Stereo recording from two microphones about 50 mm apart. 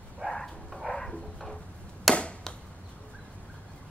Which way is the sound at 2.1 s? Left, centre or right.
Centre.